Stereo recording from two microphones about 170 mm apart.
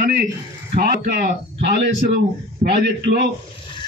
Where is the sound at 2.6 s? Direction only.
45° right (ahead or behind).